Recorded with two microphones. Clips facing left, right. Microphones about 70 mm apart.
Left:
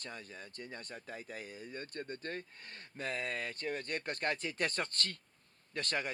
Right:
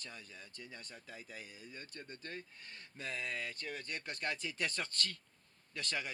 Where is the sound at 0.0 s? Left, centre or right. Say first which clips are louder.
Left 5 dB; left.